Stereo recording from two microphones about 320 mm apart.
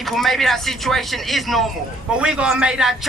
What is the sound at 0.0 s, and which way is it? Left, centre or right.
Speech, centre.